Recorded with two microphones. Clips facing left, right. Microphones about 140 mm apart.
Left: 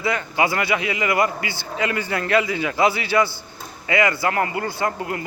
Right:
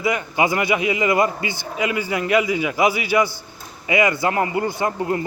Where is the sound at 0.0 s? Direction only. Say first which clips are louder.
Right 1 dB; 15° right (ahead or behind).